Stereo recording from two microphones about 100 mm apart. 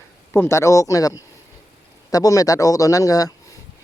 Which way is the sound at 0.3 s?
30° left (ahead or behind).